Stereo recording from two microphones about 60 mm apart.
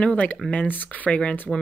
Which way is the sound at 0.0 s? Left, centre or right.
Centre.